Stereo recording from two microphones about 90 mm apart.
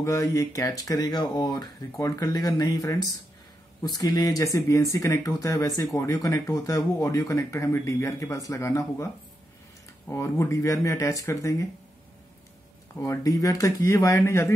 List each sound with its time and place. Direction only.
0.0 s speech: 35° left (ahead or behind)
13.0 s speech: 35° left (ahead or behind)